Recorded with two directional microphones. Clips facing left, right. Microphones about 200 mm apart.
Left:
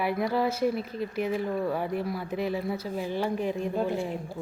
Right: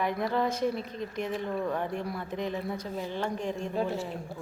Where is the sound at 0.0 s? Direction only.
5° left (ahead or behind).